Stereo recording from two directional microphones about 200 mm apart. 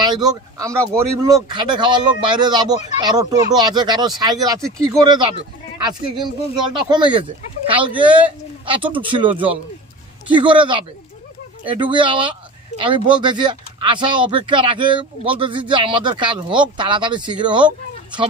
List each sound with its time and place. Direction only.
0.0 s speech: 20° right (ahead or behind)